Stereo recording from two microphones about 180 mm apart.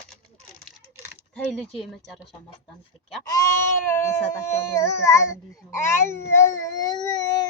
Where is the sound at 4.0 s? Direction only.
15° left (ahead or behind).